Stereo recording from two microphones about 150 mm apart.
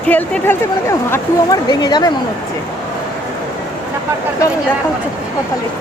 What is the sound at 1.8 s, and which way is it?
Speech, 30° left (ahead or behind).